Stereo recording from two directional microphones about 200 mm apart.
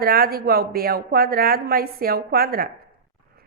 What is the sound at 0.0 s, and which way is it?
A woman's voice, 50° right (ahead or behind).